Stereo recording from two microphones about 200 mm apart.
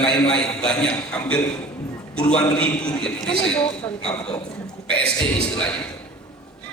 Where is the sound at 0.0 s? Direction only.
5° left (ahead or behind).